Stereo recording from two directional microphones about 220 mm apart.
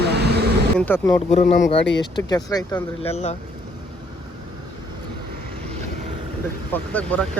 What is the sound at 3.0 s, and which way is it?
Speech, 30° left (ahead or behind).